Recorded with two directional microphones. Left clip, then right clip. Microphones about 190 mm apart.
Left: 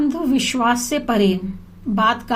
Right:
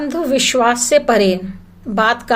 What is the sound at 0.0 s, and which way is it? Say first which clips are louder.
A woman's voice: right 4 dB; 15° right (ahead or behind).